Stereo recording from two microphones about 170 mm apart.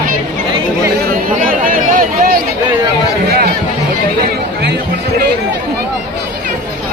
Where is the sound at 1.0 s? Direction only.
55° right (ahead or behind).